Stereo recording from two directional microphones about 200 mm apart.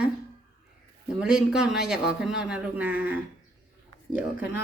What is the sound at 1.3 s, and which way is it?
A man's voice, 5° right (ahead or behind).